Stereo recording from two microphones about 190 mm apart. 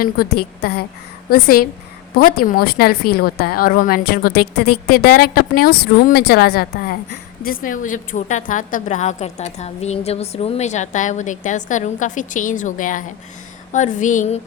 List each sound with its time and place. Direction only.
0.0 s a woman's voice: 55° left (ahead or behind); by 14.4 s 40° left (ahead or behind)